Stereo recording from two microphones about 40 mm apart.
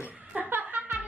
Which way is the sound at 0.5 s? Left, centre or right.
Right.